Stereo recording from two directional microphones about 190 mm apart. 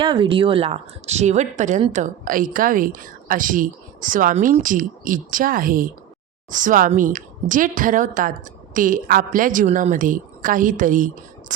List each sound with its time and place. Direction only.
0.0 s a woman's voice: 25° right (ahead or behind); by 11.5 s 45° right (ahead or behind)